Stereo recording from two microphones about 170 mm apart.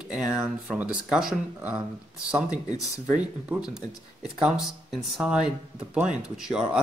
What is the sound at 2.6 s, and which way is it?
Speech, 20° left (ahead or behind).